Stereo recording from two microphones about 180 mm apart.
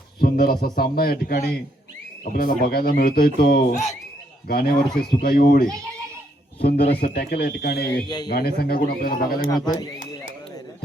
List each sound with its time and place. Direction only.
0.2 s speech: 55° left (ahead or behind)
8.0 s speech: 20° left (ahead or behind)
8.3 s speech: 60° left (ahead or behind)
9.5 s speech: 25° left (ahead or behind)